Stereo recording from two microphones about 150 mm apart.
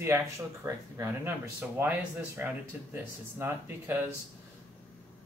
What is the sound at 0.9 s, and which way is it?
Speech, 15° right (ahead or behind).